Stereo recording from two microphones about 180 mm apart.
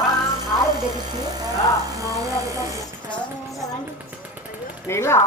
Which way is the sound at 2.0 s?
20° right (ahead or behind).